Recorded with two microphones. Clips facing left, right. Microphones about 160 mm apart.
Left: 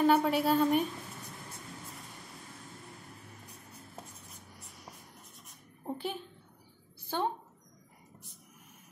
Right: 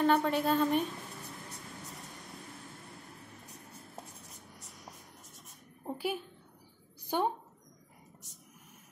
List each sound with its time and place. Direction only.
0.0 s a woman's voice: 5° left (ahead or behind)
5.9 s a sound: 5° right (ahead or behind)
7.1 s a woman's voice: 15° right (ahead or behind)